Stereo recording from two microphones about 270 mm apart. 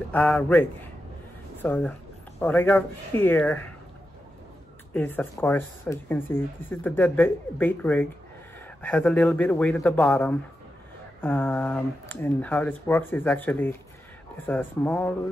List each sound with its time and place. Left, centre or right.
0.1 s speech: centre
4.9 s speech: centre